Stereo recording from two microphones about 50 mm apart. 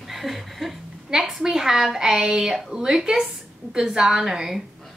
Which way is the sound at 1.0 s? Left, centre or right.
Centre.